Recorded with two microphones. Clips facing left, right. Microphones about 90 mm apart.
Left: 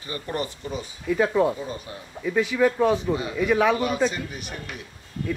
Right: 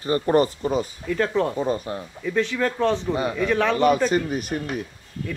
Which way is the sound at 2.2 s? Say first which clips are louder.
Left 2 dB; 10° left (ahead or behind).